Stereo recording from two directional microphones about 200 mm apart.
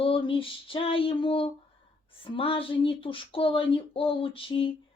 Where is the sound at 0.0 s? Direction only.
25° left (ahead or behind).